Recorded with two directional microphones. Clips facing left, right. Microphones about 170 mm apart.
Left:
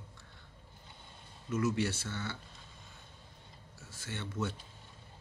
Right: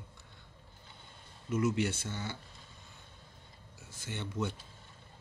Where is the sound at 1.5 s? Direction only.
15° right (ahead or behind).